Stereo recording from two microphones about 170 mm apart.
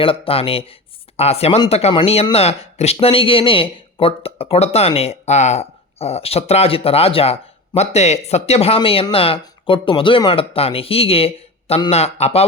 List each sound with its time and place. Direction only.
0.0 s speech: 35° left (ahead or behind)